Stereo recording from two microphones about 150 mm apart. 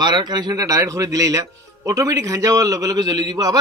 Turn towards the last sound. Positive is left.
turn(degrees=-25)  # may be behind; listen again after turning